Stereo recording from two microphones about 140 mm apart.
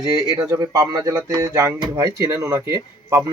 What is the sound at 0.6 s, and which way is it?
Speech, 25° right (ahead or behind).